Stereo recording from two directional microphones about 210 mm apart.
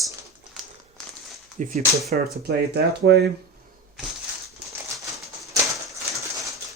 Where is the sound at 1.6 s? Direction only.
35° right (ahead or behind).